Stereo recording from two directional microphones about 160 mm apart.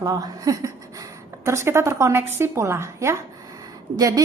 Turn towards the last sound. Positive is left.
turn(degrees=-25)  # may be behind; listen again after turning